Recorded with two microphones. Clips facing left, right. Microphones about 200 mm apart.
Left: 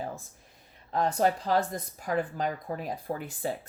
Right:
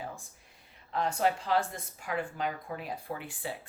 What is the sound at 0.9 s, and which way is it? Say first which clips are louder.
Speech: left 3 dB; 40° left (ahead or behind).